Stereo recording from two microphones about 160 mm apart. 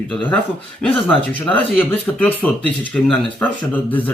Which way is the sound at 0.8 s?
5° left (ahead or behind).